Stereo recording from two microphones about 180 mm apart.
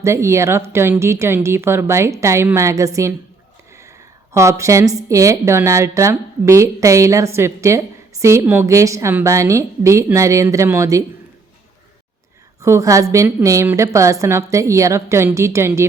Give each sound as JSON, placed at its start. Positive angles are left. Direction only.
{"t": 0.0, "sound": "a woman's voice", "side_deg": -15}
{"t": 4.3, "sound": "a woman's voice", "side_deg": -15}
{"t": 12.6, "sound": "a woman's voice", "side_deg": -15}